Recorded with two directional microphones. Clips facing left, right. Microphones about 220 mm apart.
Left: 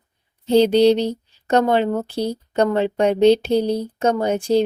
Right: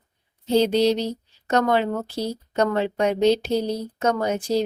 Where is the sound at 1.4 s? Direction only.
30° left (ahead or behind).